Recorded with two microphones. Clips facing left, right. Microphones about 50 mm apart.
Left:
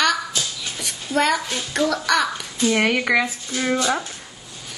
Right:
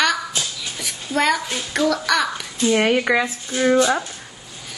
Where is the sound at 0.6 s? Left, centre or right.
Centre.